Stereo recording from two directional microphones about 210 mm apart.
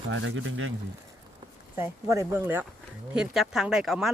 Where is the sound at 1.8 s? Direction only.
15° right (ahead or behind).